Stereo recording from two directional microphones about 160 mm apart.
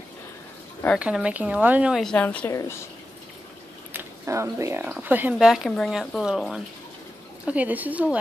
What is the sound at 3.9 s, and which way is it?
A woman's voice, 20° right (ahead or behind).